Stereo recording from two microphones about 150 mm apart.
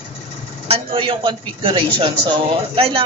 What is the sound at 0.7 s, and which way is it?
A woman's voice, 35° right (ahead or behind).